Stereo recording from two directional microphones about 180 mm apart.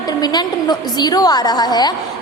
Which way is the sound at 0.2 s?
20° left (ahead or behind).